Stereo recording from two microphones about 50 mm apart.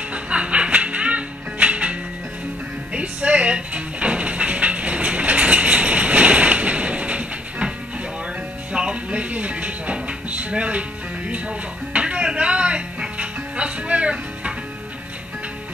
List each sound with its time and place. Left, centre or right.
0.1 s music: right
8.7 s music: right